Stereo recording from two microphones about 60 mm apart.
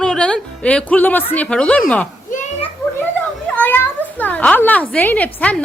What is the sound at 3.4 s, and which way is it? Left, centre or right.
Speech, left.